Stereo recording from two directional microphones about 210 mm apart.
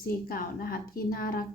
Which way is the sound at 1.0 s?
45° left (ahead or behind).